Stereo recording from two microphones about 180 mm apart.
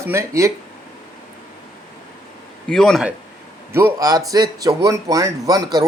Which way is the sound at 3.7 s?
15° right (ahead or behind).